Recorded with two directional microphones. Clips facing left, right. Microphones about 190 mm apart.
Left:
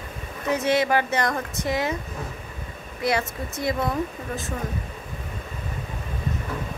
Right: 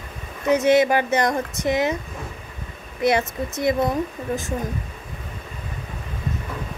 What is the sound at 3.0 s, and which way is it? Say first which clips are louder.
Speech: right 5 dB; 20° right (ahead or behind).